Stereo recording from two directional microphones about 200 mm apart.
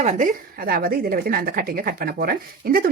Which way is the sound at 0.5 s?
45° right (ahead or behind).